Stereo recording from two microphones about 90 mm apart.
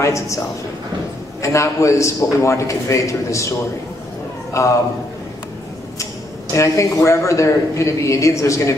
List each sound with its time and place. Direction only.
0.0 s speech: 35° left (ahead or behind)
1.4 s speech: 35° left (ahead or behind)
4.6 s speech: 35° left (ahead or behind)
6.5 s speech: 35° left (ahead or behind)